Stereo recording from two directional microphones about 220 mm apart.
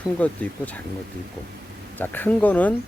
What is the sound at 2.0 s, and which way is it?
Speech, 10° left (ahead or behind).